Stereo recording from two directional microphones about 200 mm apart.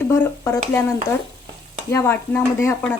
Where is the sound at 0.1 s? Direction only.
15° left (ahead or behind).